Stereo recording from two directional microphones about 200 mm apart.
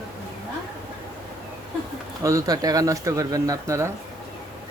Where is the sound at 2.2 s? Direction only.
15° right (ahead or behind).